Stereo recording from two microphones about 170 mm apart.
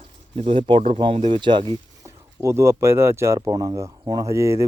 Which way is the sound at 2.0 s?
15° right (ahead or behind).